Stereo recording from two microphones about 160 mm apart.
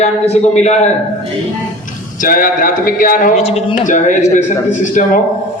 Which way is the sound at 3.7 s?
50° left (ahead or behind).